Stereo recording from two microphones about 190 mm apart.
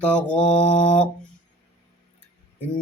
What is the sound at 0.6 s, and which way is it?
Mantra, 40° left (ahead or behind).